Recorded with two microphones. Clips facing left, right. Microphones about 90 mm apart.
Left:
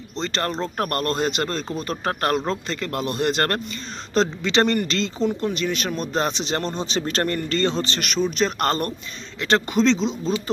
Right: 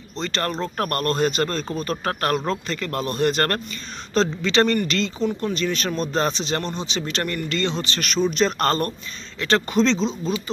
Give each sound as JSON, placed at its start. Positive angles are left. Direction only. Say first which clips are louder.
{"t": 0.1, "sound": "speech", "louder": "even", "side_deg": 25}
{"t": 5.5, "sound": "speech", "louder": "right 1 dB", "side_deg": 10}
{"t": 6.6, "sound": "speech", "louder": "left 2 dB", "side_deg": 40}
{"t": 8.2, "sound": "speech", "louder": "right 2 dB", "side_deg": 0}
{"t": 8.6, "sound": "speech", "louder": "right 1 dB", "side_deg": 20}